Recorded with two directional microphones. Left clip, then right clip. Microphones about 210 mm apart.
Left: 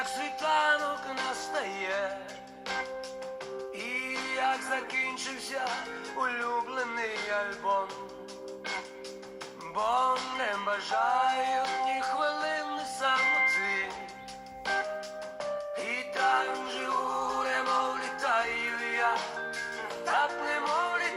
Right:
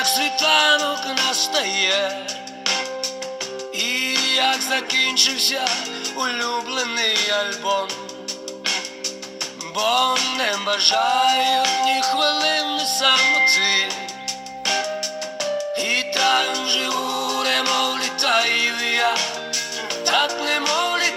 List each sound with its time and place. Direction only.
0.0 s music: 50° right (ahead or behind)
1.3 s music: 35° right (ahead or behind)
2.6 s music: 35° right (ahead or behind)
3.8 s music: 50° right (ahead or behind)
9.7 s music: 50° right (ahead or behind)
15.7 s music: 50° right (ahead or behind)
17.1 s music: 35° right (ahead or behind)
17.3 s music: 50° right (ahead or behind)